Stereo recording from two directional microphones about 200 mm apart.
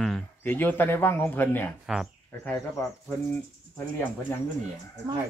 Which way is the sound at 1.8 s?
Centre (ahead or behind).